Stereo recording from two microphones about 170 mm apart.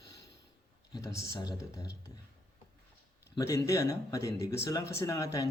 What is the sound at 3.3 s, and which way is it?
Speech, 20° left (ahead or behind).